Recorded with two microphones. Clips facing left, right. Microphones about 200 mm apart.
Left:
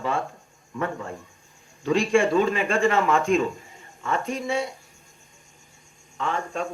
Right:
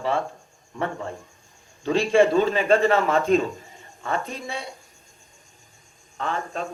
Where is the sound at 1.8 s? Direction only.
30° right (ahead or behind).